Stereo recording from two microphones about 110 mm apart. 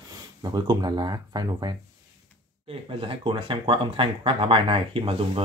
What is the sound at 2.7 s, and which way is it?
Speech, 55° right (ahead or behind).